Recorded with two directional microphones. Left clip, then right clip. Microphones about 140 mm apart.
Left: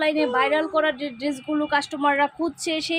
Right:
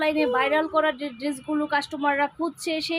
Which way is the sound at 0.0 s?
10° left (ahead or behind).